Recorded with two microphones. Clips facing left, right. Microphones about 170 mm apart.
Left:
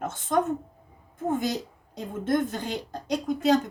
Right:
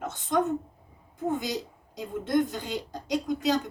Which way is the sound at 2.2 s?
50° left (ahead or behind).